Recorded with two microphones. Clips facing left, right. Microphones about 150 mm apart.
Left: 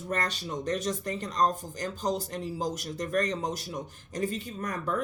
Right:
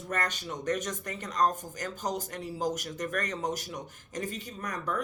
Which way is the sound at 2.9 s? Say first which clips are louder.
Left 4 dB; 25° left (ahead or behind).